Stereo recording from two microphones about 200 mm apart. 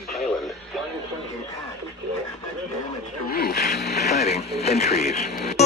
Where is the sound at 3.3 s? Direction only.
50° left (ahead or behind).